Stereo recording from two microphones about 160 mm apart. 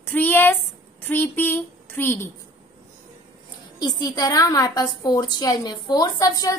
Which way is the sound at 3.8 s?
25° left (ahead or behind).